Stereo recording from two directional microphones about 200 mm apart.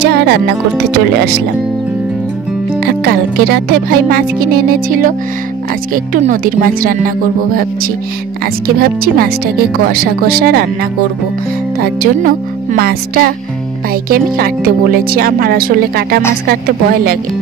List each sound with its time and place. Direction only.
0.0 s speech: 55° right (ahead or behind)
2.8 s speech: 50° right (ahead or behind)
6.1 s speech: 45° right (ahead or behind)
8.6 s speech: 45° right (ahead or behind)